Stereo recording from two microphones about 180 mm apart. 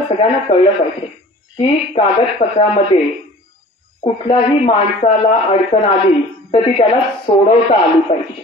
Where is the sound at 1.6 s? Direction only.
35° left (ahead or behind).